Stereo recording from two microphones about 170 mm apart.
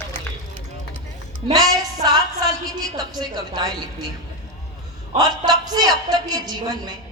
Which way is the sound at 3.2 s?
25° right (ahead or behind).